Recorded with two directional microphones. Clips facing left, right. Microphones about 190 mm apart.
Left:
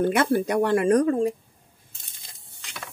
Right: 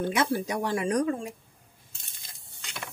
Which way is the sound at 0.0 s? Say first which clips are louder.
Left 6 dB; 60° left (ahead or behind).